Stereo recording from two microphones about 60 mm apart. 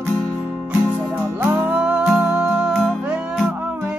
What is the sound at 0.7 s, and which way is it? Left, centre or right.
Music, right.